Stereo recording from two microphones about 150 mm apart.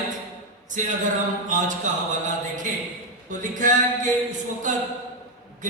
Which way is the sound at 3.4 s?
60° right (ahead or behind).